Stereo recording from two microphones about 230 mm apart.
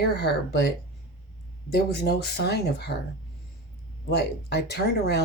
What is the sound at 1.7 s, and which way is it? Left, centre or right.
Speech, left.